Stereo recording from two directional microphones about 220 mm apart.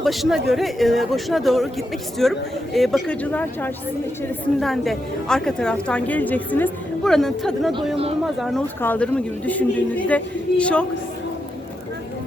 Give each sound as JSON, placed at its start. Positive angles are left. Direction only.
{"t": 0.0, "sound": "a woman's voice", "side_deg": 0}